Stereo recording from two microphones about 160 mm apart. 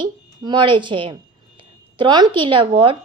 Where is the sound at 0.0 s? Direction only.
30° right (ahead or behind).